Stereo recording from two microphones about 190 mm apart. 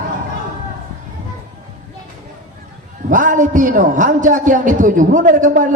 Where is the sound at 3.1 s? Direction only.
45° right (ahead or behind).